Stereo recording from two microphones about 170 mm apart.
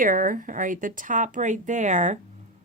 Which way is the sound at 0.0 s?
50° right (ahead or behind).